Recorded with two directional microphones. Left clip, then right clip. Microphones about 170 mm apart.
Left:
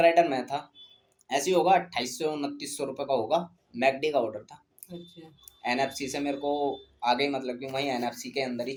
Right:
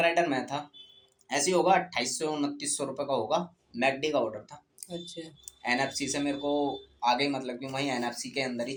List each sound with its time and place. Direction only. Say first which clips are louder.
0.0 s speech: left 4 dB; 35° left (ahead or behind)
4.9 s speech: right 6 dB; 45° right (ahead or behind)
5.5 s speech: left 1 dB; 35° left (ahead or behind)